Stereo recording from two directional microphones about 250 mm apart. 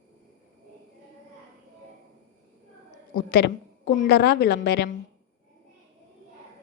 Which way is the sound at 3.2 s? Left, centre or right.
Left.